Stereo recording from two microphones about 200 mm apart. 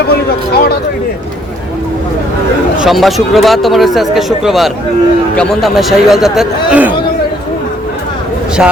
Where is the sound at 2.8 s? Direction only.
Centre (ahead or behind).